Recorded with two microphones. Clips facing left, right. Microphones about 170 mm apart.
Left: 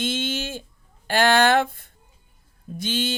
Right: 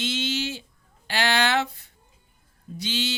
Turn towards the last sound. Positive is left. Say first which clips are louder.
# left 3 dB
turn(degrees=50)  # may be behind; listen again after turning